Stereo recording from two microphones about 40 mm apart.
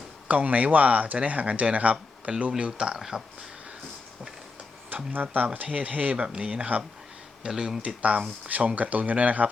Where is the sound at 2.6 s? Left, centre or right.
Right.